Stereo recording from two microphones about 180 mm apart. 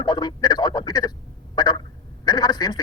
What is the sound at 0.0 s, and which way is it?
Radio, 25° left (ahead or behind).